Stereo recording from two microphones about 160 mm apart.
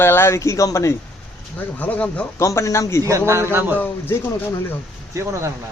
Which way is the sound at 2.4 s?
20° left (ahead or behind).